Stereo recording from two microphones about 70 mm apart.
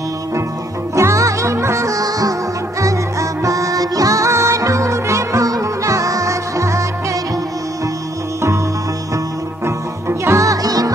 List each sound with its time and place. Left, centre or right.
0.9 s music: right
9.7 s music: right